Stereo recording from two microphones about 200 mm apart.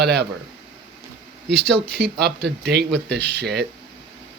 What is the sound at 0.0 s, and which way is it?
Speech, 55° right (ahead or behind).